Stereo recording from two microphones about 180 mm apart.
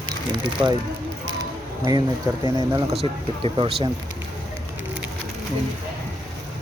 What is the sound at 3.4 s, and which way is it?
Speech, 30° right (ahead or behind).